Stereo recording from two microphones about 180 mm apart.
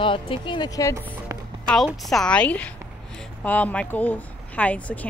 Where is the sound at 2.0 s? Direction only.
5° left (ahead or behind).